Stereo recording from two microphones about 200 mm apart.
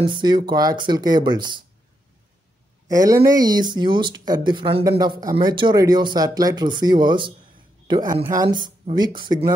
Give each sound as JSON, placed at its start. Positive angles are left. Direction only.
{"t": 0.0, "sound": "speech", "side_deg": -25}
{"t": 2.9, "sound": "speech", "side_deg": -15}